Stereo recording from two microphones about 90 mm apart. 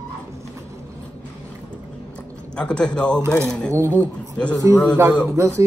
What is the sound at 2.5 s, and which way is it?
Speech, 10° left (ahead or behind).